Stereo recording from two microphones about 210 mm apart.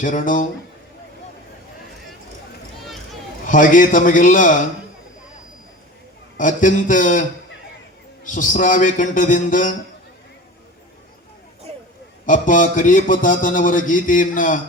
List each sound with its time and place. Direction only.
0.0 s a man's voice: 40° left (ahead or behind)
3.4 s a man's voice: 40° left (ahead or behind)
6.3 s a man's voice: 40° left (ahead or behind)
11.7 s a sound: 30° right (ahead or behind)
12.2 s a man's voice: 40° left (ahead or behind)